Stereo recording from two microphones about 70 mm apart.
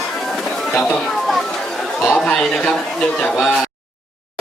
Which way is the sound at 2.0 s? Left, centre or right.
Centre.